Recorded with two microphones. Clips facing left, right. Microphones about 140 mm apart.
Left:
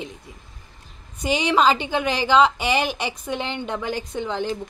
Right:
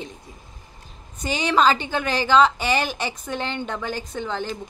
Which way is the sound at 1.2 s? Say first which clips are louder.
Left 1 dB; 15° left (ahead or behind).